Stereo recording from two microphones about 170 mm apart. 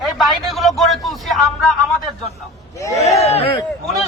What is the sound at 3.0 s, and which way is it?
Speech, 40° left (ahead or behind).